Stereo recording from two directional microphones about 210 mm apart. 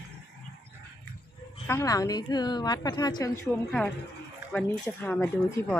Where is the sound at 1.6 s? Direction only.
15° left (ahead or behind).